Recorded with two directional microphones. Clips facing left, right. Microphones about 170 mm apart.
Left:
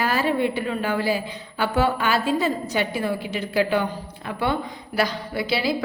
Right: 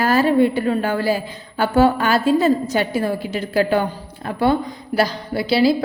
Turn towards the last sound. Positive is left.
turn(degrees=-35)  # may be behind; listen again after turning